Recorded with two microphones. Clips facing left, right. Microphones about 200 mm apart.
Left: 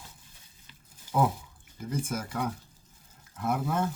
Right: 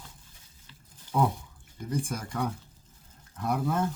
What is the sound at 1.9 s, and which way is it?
Speech, 5° left (ahead or behind).